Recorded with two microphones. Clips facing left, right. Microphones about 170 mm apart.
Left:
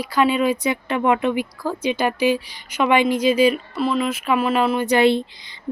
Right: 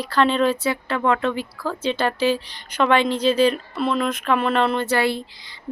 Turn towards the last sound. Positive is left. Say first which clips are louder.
# left 6 dB
turn(degrees=20)  # may be behind; listen again after turning